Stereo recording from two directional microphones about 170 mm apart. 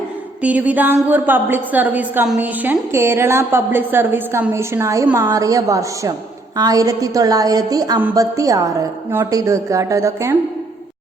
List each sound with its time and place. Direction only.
0.4 s a woman's voice: 10° right (ahead or behind)